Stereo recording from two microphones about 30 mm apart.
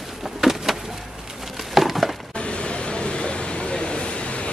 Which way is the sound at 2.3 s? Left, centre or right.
Left.